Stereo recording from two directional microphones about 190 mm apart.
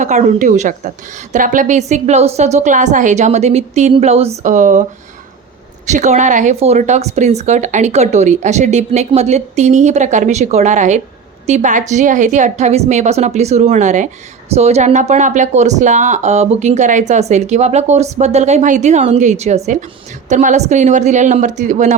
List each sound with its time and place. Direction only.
0.0 s speech: 40° right (ahead or behind)